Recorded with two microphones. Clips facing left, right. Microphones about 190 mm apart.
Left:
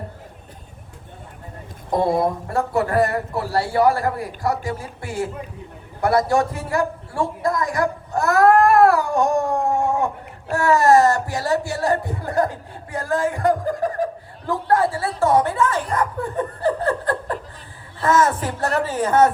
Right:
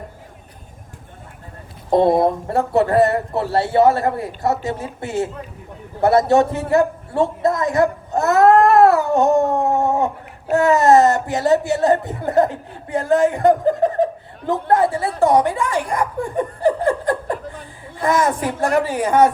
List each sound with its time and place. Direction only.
2.2 s a man's voice: 25° right (ahead or behind)